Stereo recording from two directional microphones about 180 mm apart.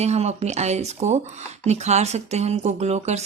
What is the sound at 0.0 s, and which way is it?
Speech, 35° right (ahead or behind).